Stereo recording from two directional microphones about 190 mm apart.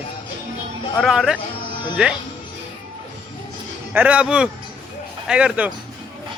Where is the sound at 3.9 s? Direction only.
5° right (ahead or behind).